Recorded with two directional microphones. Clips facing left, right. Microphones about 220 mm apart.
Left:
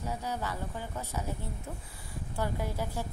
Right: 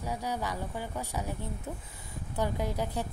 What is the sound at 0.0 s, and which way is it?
Speech, 15° right (ahead or behind).